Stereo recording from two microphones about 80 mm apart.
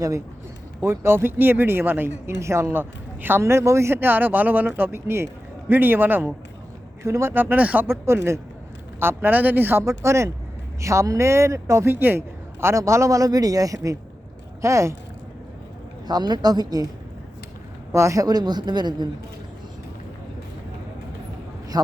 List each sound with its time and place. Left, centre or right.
0.8 s speech: right
3.4 s speech: right
7.9 s a man's voice: right
9.8 s a man's voice: right
16.0 s a woman's voice: right
17.9 s a woman's voice: right